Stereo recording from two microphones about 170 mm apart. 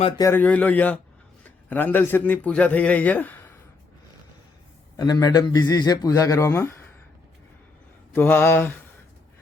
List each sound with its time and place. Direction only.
0.2 s a man's voice: 15° left (ahead or behind)
4.9 s a man's voice: 20° left (ahead or behind)
8.1 s speech: 10° left (ahead or behind)